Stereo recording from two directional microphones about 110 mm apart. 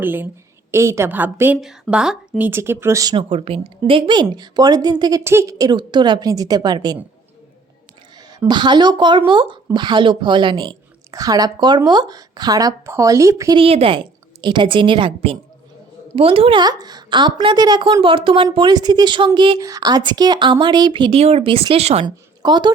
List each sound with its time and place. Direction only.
0.0 s a woman's voice: 20° right (ahead or behind)
1.6 s a woman's voice: 5° right (ahead or behind)
2.4 s a woman's voice: 20° right (ahead or behind)
3.1 s a woman's voice: 50° right (ahead or behind)
5.2 s a woman's voice: 25° right (ahead or behind); by 7.0 s 40° right (ahead or behind)
8.4 s speech: 45° right (ahead or behind)
11.1 s a woman's voice: 35° right (ahead or behind)
13.6 s a woman's voice: 60° right (ahead or behind)
16.6 s a woman's voice: 40° right (ahead or behind)
18.5 s speech: 40° right (ahead or behind)
19.5 s speech: 30° right (ahead or behind); by 22.0 s 70° right (ahead or behind)
22.0 s a woman's voice: 40° right (ahead or behind)